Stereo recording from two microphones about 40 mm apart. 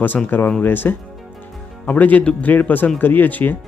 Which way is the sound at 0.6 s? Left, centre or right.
Left.